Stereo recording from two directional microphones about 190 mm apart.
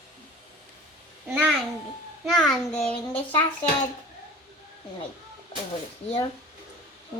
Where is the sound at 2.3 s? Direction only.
Centre (ahead or behind).